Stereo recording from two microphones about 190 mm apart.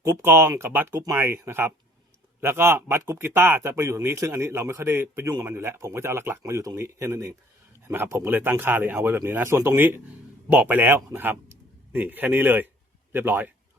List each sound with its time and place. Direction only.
0.0 s a man's voice: 10° right (ahead or behind)